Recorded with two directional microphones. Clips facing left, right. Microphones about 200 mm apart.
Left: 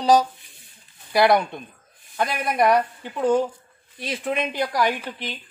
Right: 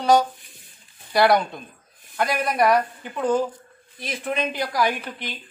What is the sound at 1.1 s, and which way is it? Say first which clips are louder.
Speech: even; 5° left (ahead or behind).